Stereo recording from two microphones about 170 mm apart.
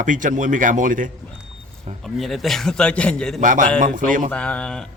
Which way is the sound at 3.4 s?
50° right (ahead or behind).